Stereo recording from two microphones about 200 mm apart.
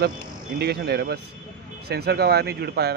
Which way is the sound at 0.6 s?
55° right (ahead or behind).